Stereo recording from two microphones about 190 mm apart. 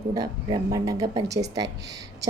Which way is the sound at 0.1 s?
20° right (ahead or behind).